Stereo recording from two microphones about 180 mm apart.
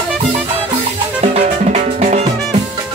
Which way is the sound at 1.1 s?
40° right (ahead or behind).